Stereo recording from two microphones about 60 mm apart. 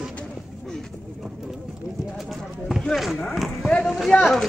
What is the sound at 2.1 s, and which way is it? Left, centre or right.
Speech, centre.